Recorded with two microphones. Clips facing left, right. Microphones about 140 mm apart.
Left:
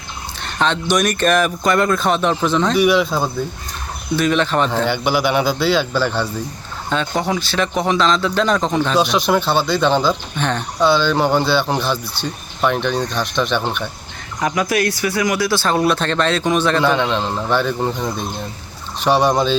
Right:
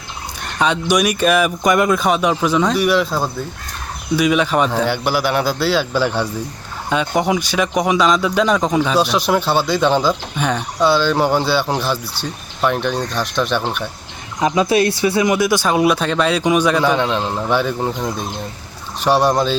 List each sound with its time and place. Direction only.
0.6 s speech: 10° right (ahead or behind)
14.4 s speech: 25° right (ahead or behind); by 19.5 s centre (ahead or behind)